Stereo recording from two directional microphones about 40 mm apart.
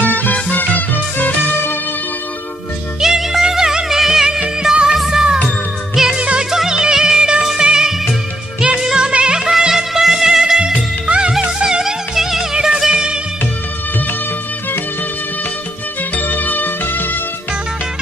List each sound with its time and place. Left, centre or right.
0.1 s music: left
3.0 s music: centre
4.6 s music of bollywood: centre
4.9 s music: centre
6.1 s music: right
6.5 s music: centre
16.1 s music: left